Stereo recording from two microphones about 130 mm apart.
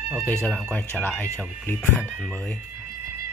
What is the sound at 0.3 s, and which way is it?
Speech, 10° left (ahead or behind).